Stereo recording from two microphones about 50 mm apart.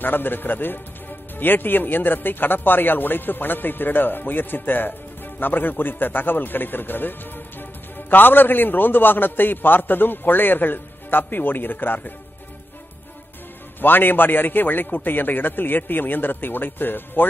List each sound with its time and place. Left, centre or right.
0.0 s a man's voice: left
13.7 s speech: left